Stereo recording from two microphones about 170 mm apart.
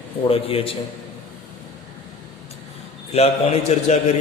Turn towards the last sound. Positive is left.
turn(degrees=40)  # may be behind; listen again after turning